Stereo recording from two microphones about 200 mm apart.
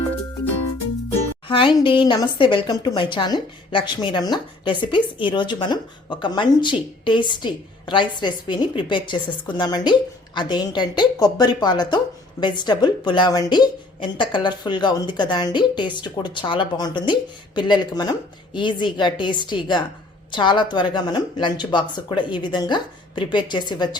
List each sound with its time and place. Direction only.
1.5 s a woman's voice: 25° left (ahead or behind)